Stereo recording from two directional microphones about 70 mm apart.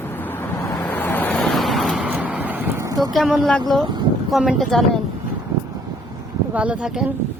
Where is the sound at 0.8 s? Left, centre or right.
Left.